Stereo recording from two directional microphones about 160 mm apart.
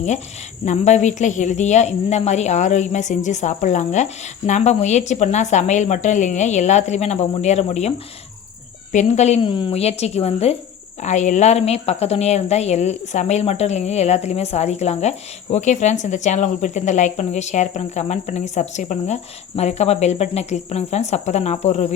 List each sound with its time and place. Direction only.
0.6 s speech: 50° left (ahead or behind)
9.4 s a woman's voice: 30° left (ahead or behind)